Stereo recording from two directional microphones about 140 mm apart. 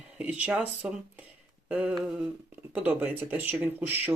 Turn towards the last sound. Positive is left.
turn(degrees=-15)  # may be behind; listen again after turning